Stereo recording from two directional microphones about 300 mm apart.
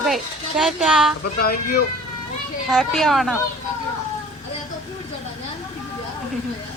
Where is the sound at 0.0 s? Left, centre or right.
Centre.